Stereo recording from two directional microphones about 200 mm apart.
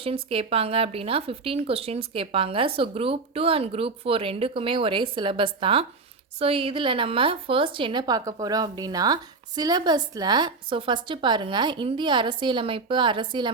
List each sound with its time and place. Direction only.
0.0 s a woman's voice: 30° right (ahead or behind)